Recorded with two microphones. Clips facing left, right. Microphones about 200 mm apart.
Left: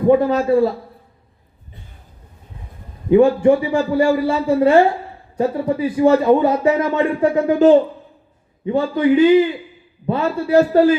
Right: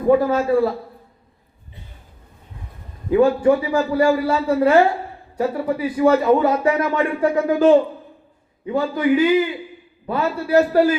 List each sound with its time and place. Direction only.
0.1 s speech: 20° left (ahead or behind)
3.1 s speech: 25° left (ahead or behind)